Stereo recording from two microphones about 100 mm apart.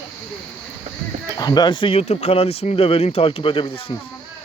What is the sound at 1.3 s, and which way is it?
Speech, 40° left (ahead or behind).